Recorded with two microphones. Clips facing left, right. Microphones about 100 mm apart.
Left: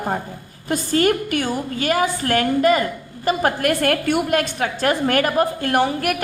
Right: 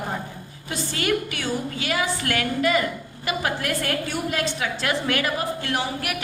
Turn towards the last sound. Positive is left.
turn(degrees=50)  # may be behind; listen again after turning